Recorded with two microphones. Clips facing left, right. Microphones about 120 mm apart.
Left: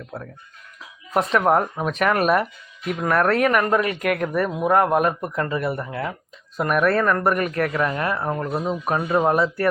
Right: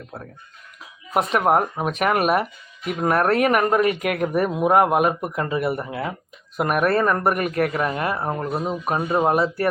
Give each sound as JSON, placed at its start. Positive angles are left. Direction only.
{"t": 1.1, "sound": "speech", "side_deg": -10}